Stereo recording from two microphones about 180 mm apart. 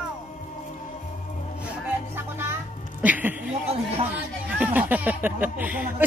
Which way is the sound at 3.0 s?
10° right (ahead or behind).